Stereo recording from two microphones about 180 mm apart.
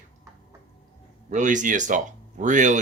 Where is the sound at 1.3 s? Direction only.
45° right (ahead or behind).